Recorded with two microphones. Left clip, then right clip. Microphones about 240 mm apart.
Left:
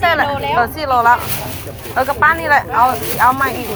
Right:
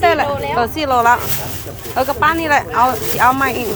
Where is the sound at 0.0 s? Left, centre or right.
Right.